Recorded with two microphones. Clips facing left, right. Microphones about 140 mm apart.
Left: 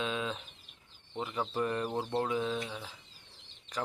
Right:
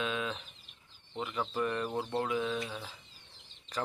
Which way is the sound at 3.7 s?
10° left (ahead or behind).